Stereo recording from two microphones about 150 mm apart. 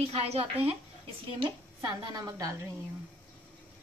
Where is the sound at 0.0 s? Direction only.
40° right (ahead or behind).